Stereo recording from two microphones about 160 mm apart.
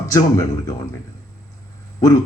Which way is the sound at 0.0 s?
20° left (ahead or behind).